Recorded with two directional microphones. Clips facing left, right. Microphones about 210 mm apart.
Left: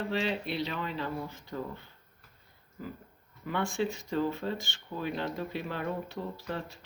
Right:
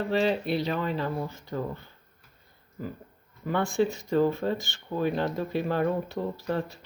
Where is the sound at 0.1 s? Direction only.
40° right (ahead or behind).